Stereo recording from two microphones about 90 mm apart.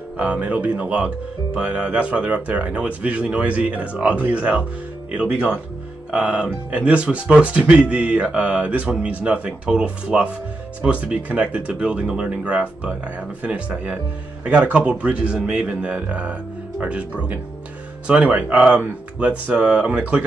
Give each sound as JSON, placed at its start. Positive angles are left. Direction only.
{"t": 0.2, "sound": "speech", "side_deg": -15}